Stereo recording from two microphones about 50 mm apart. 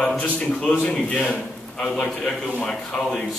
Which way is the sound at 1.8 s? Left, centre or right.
Centre.